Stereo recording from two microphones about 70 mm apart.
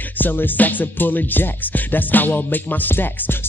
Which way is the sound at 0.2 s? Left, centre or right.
Left.